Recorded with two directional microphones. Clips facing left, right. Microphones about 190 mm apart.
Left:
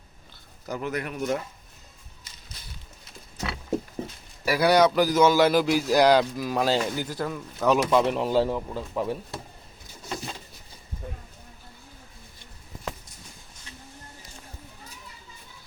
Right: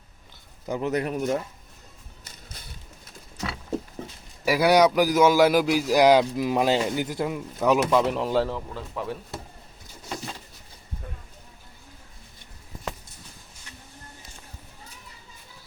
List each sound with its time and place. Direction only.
0.7 s speech: 30° right (ahead or behind)
4.4 s a man's voice: 15° right (ahead or behind); by 8.4 s 5° left (ahead or behind)
8.4 s speech: 15° left (ahead or behind)